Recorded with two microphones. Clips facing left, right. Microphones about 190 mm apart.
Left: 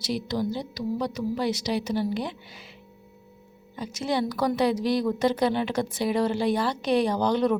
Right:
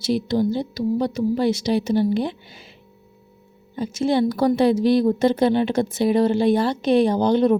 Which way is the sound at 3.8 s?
25° right (ahead or behind).